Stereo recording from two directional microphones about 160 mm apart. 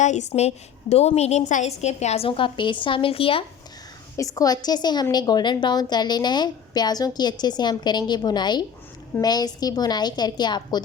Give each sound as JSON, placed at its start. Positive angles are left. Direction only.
{"t": 0.0, "sound": "a woman's voice", "side_deg": 50}
{"t": 4.2, "sound": "a woman's voice", "side_deg": 20}